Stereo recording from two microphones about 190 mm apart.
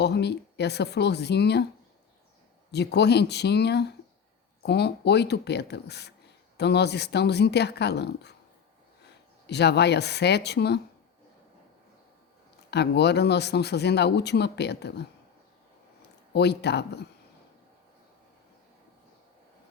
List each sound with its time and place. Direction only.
0.0 s speech: 60° left (ahead or behind)
2.7 s speech: 60° left (ahead or behind)
9.5 s speech: 60° left (ahead or behind)
12.5 s speech: 60° left (ahead or behind)
16.3 s speech: 60° left (ahead or behind)